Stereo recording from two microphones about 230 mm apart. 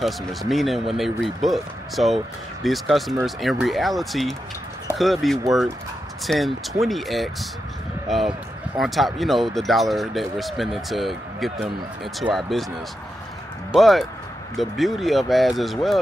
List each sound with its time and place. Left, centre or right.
0.0 s speech: centre
13.7 s speech: centre